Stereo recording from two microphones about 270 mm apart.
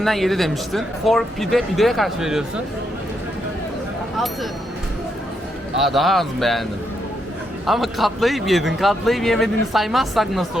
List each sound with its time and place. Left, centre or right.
0.0 s a man's voice: centre
5.7 s a man's voice: centre
7.7 s a man's voice: centre